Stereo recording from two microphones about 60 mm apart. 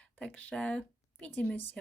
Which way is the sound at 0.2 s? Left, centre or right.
Left.